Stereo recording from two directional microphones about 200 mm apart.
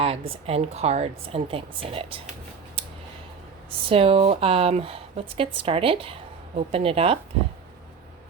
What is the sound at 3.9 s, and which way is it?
Speech, 30° right (ahead or behind).